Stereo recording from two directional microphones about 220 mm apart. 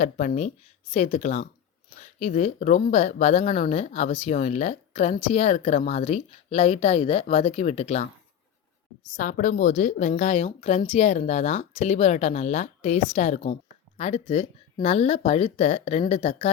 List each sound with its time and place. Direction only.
0.0 s a woman's voice: 35° left (ahead or behind)
9.1 s a woman's voice: 35° left (ahead or behind)